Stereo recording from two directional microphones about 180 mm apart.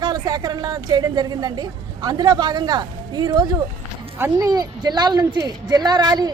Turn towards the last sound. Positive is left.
turn(degrees=-20)  # may be behind; listen again after turning